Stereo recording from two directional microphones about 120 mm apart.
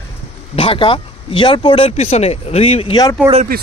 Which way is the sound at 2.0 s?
65° left (ahead or behind).